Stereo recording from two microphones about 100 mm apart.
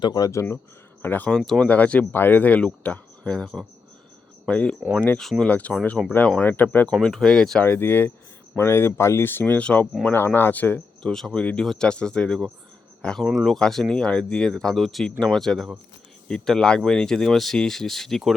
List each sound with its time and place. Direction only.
0.0 s speech: 45° left (ahead or behind)
0.3 s speech: 30° left (ahead or behind)
1.0 s speech: 15° left (ahead or behind)
1.4 s speech: 5° left (ahead or behind)
1.6 s speech: 15° left (ahead or behind)
7.0 s speech: 5° left (ahead or behind)
7.6 s speech: 20° left (ahead or behind)
10.1 s speech: 25° left (ahead or behind)
11.0 s speech: 5° left (ahead or behind)